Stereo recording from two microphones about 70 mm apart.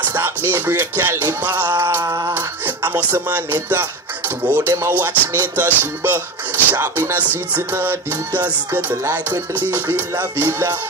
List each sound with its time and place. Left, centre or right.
0.5 s music: right
2.0 s a sound: right
2.3 s music: right
9.9 s music: right